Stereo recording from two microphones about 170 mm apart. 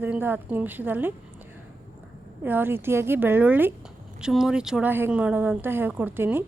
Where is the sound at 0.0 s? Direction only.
10° right (ahead or behind).